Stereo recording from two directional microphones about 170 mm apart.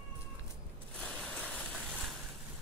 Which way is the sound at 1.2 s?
5° left (ahead or behind).